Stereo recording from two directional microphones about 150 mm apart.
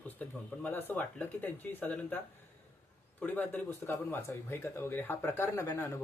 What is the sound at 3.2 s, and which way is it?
Speech, 10° left (ahead or behind).